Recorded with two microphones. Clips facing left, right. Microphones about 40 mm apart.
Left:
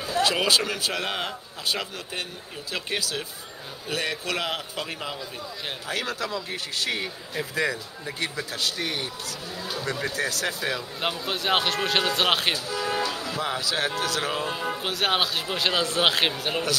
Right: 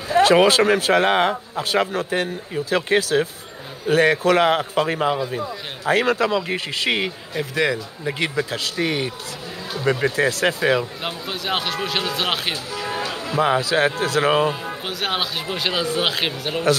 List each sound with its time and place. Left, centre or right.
0.1 s speech: right
6.3 s speech: right
7.5 s speech: right
8.8 s speech: right
9.8 s a man's voice: right
11.0 s speech: centre
13.0 s music: right
13.6 s a man's voice: right
14.6 s speech: centre